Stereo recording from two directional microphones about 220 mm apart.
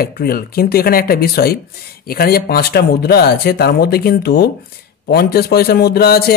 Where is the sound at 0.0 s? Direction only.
45° left (ahead or behind).